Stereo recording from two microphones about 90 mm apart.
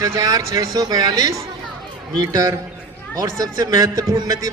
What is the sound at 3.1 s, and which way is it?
A man's voice, 40° right (ahead or behind).